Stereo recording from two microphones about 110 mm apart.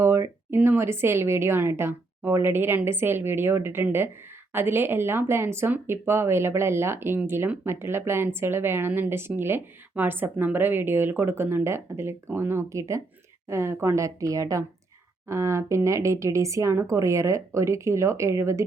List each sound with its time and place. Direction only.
0.0 s speech: 20° right (ahead or behind)